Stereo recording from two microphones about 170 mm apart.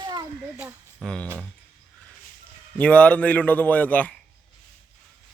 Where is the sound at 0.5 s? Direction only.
5° right (ahead or behind).